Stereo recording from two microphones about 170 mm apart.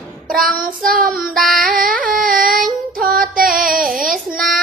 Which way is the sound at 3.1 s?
55° right (ahead or behind).